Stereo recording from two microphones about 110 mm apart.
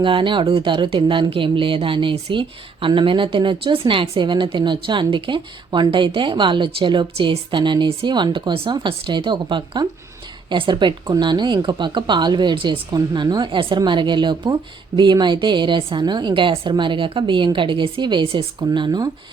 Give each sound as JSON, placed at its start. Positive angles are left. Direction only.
{"t": 0.0, "sound": "speech", "side_deg": -50}
{"t": 12.9, "sound": "speech", "side_deg": -40}